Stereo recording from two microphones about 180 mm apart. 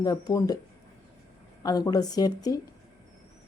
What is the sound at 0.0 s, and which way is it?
Speech, 20° left (ahead or behind).